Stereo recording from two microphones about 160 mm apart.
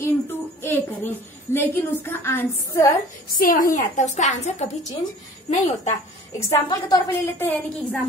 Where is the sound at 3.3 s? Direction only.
60° left (ahead or behind); by 4.7 s 45° left (ahead or behind).